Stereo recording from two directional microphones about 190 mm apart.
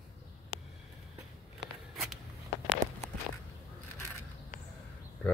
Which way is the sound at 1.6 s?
70° right (ahead or behind).